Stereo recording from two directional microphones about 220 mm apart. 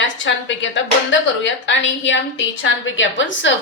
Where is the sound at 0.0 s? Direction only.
55° left (ahead or behind).